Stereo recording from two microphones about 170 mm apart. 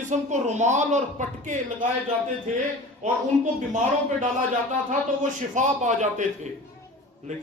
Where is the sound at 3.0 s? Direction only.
45° right (ahead or behind).